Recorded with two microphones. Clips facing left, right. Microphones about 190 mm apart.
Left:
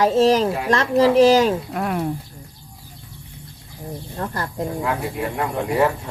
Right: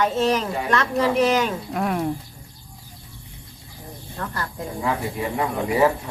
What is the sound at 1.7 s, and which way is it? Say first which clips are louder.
Speech: even; centre (ahead or behind).